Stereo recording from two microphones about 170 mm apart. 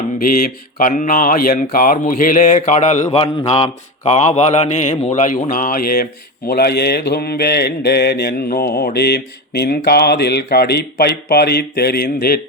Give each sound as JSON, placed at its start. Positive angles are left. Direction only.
{"t": 0.2, "sound": "speech", "side_deg": 60}
{"t": 6.5, "sound": "mantra", "side_deg": 65}